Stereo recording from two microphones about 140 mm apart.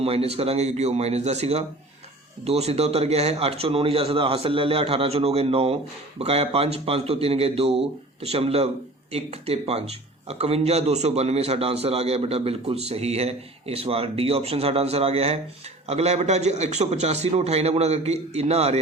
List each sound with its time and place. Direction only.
0.0 s speech: 45° right (ahead or behind)